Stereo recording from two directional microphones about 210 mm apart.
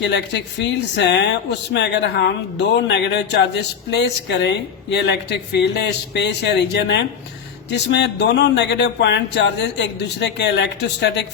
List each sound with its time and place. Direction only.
0.0 s speech: 55° left (ahead or behind)